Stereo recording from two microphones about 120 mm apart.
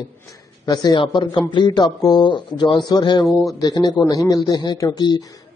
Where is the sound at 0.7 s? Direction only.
40° left (ahead or behind).